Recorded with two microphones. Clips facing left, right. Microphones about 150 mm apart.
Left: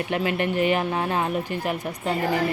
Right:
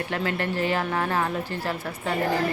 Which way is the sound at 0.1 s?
20° left (ahead or behind).